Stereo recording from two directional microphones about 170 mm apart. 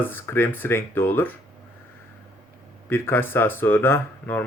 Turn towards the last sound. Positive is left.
turn(degrees=10)  # may be behind; listen again after turning